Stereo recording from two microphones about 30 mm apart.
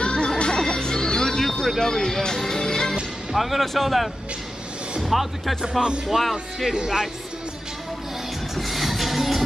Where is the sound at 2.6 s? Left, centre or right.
Left.